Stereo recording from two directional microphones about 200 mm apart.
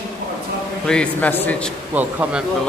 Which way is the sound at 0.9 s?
5° left (ahead or behind).